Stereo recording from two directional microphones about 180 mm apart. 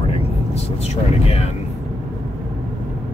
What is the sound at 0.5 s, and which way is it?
Speech, 35° left (ahead or behind).